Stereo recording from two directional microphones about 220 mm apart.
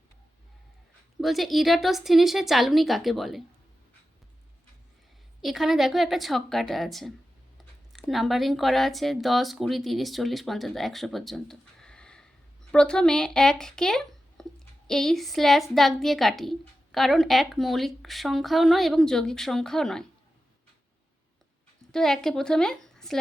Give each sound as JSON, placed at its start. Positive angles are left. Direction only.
{"t": 1.2, "sound": "a woman's voice", "side_deg": 0}
{"t": 5.4, "sound": "a woman's voice", "side_deg": 0}
{"t": 21.9, "sound": "a woman's voice", "side_deg": 0}